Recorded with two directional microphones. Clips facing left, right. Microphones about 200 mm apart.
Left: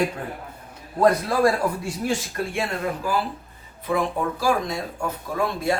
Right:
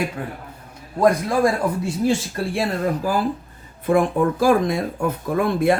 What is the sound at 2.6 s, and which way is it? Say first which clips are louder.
Speech: right 6 dB; 40° right (ahead or behind).